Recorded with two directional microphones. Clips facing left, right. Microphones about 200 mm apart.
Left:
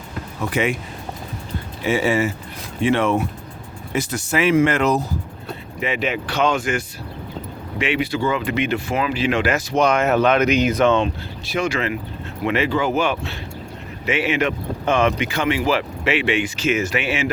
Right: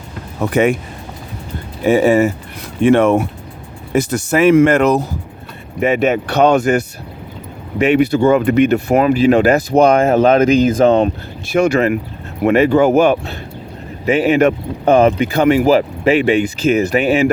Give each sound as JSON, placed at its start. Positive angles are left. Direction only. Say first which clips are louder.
{"t": 0.3, "sound": "speech", "louder": "right 8 dB", "side_deg": -45}
{"t": 1.8, "sound": "speech", "louder": "right 8 dB", "side_deg": -40}
{"t": 6.5, "sound": "speech", "louder": "right 9 dB", "side_deg": -40}